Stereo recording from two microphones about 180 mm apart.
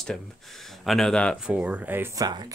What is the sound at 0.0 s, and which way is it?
Speech, centre (ahead or behind).